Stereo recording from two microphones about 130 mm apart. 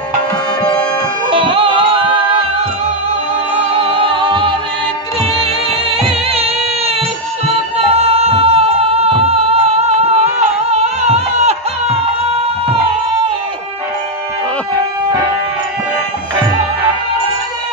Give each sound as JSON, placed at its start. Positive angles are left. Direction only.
{"t": 0.6, "sound": "bagpipes", "side_deg": 30}
{"t": 1.3, "sound": "music", "side_deg": -45}
{"t": 3.7, "sound": "music", "side_deg": -40}